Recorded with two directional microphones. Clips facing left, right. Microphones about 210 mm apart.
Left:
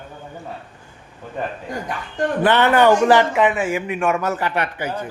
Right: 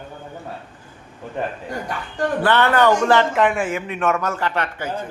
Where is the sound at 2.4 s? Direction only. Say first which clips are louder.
Left 2 dB; 20° left (ahead or behind).